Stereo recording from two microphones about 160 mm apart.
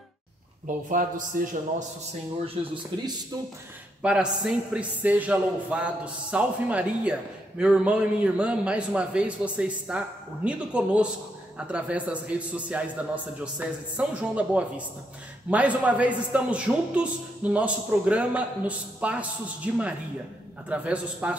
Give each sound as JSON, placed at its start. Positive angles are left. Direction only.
{"t": 0.7, "sound": "a man's voice", "side_deg": -55}
{"t": 2.4, "sound": "speech", "side_deg": -30}
{"t": 4.0, "sound": "a man's voice", "side_deg": -5}